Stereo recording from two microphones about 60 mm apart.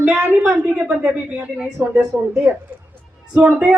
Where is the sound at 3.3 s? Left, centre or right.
Right.